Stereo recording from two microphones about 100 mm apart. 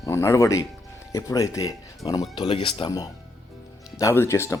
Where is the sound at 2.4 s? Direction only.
65° left (ahead or behind).